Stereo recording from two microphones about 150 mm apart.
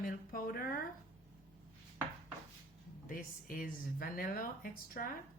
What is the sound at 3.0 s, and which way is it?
Speech, 70° left (ahead or behind).